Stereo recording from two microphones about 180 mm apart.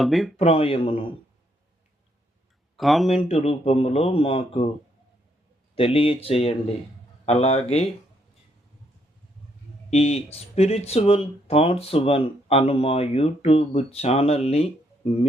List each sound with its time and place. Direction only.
0.0 s speech: centre (ahead or behind)
0.3 s speech: 35° left (ahead or behind)
2.7 s speech: centre (ahead or behind)
3.2 s speech: 35° left (ahead or behind)
5.7 s speech: 30° left (ahead or behind)
9.9 s speech: 35° left (ahead or behind)